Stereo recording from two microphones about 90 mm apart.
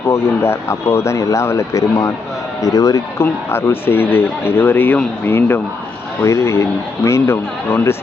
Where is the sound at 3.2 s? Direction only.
25° left (ahead or behind).